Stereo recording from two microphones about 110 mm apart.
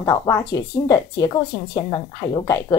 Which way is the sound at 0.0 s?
30° left (ahead or behind).